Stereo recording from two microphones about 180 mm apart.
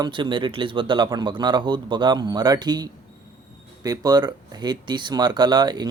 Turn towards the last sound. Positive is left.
turn(degrees=-25)  # may be behind; listen again after turning